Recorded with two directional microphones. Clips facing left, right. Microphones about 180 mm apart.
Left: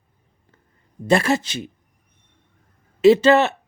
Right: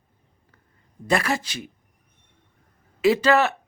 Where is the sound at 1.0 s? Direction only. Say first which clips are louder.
Left 5 dB; 25° left (ahead or behind).